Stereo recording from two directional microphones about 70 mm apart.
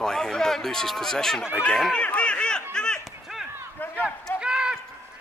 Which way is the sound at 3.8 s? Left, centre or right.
Left.